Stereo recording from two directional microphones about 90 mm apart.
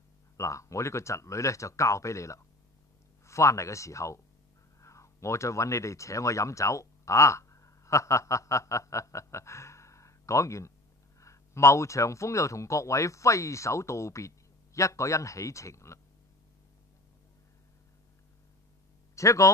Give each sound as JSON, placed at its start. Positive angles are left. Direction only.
{"t": 0.4, "sound": "speech", "side_deg": 35}
{"t": 19.1, "sound": "speech", "side_deg": 35}